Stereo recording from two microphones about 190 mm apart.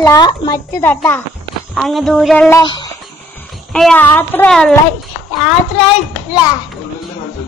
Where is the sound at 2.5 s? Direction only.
20° left (ahead or behind).